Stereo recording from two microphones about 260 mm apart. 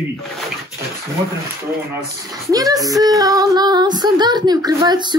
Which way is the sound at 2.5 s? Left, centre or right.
Centre.